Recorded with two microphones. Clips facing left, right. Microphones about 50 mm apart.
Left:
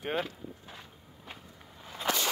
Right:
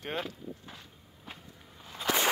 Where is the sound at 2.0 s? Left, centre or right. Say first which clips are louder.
Right 1 dB; centre.